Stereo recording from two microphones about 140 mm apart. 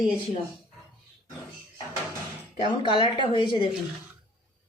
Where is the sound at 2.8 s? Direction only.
35° left (ahead or behind).